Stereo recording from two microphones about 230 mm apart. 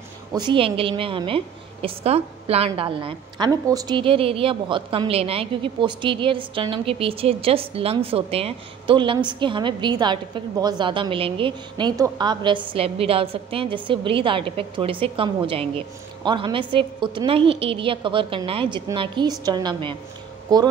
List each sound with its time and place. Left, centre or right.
0.3 s a woman's voice: centre